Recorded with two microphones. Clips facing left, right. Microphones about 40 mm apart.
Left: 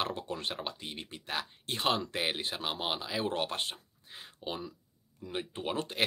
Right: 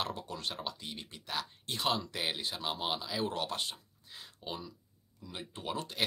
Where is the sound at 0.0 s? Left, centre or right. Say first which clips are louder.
Left 3 dB; left.